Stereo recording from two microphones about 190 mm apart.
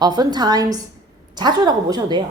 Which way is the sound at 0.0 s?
20° right (ahead or behind).